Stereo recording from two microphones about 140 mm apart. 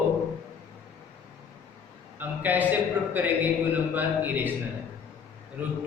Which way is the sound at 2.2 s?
10° right (ahead or behind).